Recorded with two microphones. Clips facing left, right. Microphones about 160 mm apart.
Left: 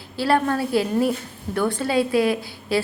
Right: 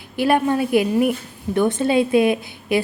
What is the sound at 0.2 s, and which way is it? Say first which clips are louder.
A woman's voice: right 3 dB; 20° right (ahead or behind).